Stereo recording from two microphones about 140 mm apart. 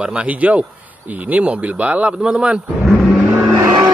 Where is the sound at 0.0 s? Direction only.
10° right (ahead or behind).